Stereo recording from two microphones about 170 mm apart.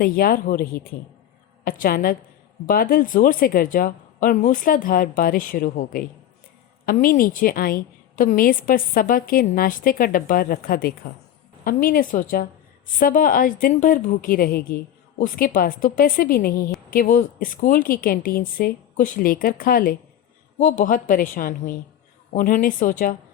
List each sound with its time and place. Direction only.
0.0 s a woman's voice: 60° left (ahead or behind)